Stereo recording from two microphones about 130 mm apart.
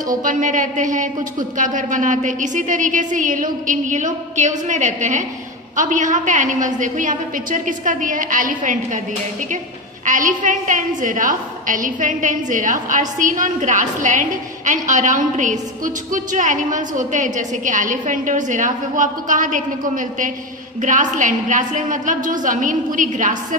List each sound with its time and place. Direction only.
0.1 s a woman's voice: 90° right
10.0 s a woman's voice: 75° right (ahead or behind); by 20.2 s 90° right
20.8 s a woman's voice: 75° right (ahead or behind)